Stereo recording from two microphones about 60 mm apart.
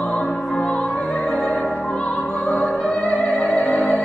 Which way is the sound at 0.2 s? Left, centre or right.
Centre.